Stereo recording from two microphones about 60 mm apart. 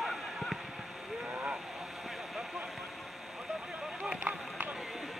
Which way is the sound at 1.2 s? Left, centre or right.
Right.